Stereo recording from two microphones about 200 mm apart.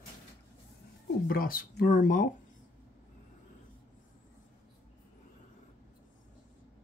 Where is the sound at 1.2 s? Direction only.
45° left (ahead or behind).